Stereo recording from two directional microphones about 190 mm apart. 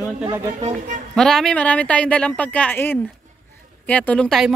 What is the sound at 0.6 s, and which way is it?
Speech, 40° right (ahead or behind).